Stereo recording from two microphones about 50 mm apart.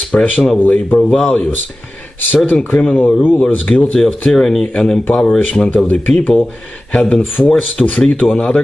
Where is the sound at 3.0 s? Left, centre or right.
Left.